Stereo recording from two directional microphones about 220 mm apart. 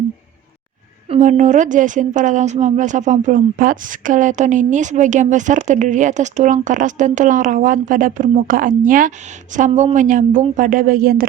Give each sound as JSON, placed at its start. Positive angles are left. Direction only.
{"t": 1.1, "sound": "a woman's voice", "side_deg": -35}